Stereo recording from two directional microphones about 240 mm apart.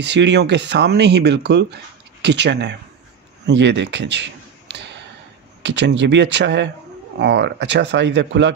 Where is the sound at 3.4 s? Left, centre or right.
Right.